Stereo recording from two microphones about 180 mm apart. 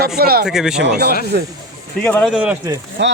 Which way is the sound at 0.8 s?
60° right (ahead or behind).